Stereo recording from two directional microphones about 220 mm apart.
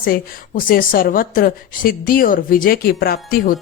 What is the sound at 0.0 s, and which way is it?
A woman's voice, 40° left (ahead or behind).